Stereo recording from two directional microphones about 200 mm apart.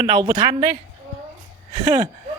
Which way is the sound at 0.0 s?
20° right (ahead or behind).